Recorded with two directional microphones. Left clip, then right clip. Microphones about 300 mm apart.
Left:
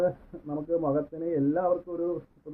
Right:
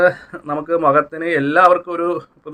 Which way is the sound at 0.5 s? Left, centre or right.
Right.